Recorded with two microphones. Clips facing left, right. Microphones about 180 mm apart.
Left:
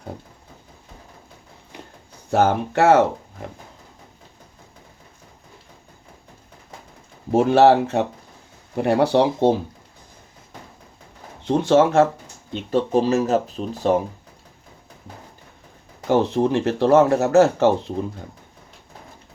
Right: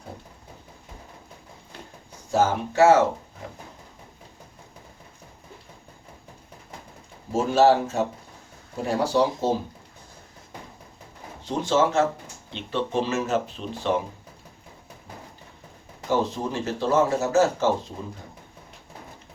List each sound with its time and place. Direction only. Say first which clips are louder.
1.7 s a sound: left 3 dB; 15° left (ahead or behind)
2.3 s speech: left 4 dB; 60° left (ahead or behind)
7.3 s speech: left 5 dB; 65° left (ahead or behind)
11.4 s speech: left 6 dB; 60° left (ahead or behind)
12.5 s speech: left 7 dB; 40° left (ahead or behind)
16.0 s speech: left 7 dB; 65° left (ahead or behind)